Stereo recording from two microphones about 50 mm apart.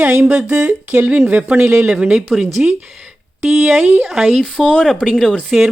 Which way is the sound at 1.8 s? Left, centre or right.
Centre.